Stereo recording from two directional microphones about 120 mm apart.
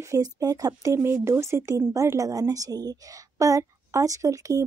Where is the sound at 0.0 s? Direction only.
30° right (ahead or behind).